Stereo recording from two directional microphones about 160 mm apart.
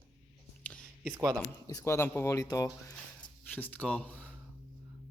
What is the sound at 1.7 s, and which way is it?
A man's voice, 15° left (ahead or behind).